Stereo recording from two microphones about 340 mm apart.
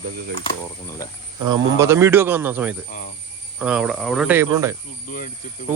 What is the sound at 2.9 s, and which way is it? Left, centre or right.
Speech, left.